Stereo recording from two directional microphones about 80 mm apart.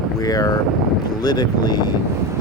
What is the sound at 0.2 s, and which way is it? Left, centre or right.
Speech, left.